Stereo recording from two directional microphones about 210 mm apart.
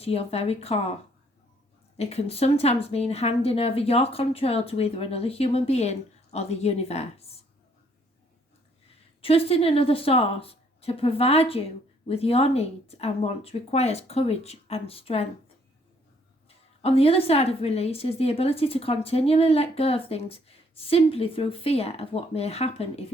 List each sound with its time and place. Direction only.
0.0 s speech: 30° left (ahead or behind)
2.0 s speech: 30° left (ahead or behind)
9.2 s speech: 30° left (ahead or behind)
16.8 s speech: 30° left (ahead or behind)